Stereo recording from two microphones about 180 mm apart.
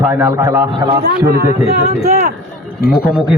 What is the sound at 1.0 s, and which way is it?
Speech, 60° right (ahead or behind).